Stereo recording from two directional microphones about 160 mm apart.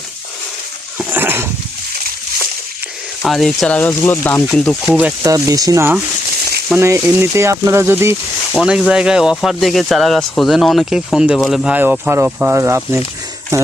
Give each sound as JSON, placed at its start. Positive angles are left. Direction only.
{"t": 0.9, "sound": "dog", "side_deg": -10}
{"t": 3.2, "sound": "speech", "side_deg": 0}
{"t": 4.8, "sound": "speech", "side_deg": -5}
{"t": 5.2, "sound": "speech", "side_deg": -20}
{"t": 8.5, "sound": "speech", "side_deg": -5}